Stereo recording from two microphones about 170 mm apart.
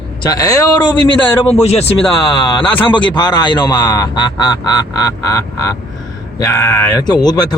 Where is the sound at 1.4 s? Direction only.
40° left (ahead or behind).